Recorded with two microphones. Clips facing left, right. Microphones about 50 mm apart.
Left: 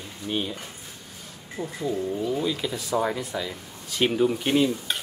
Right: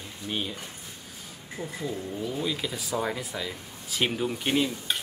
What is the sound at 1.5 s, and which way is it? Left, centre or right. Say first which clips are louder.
Speech: left 5 dB; centre.